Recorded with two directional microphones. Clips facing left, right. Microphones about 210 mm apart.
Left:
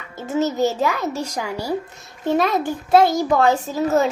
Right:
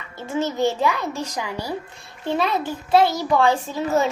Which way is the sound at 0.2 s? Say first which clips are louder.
Left 3 dB; 40° left (ahead or behind).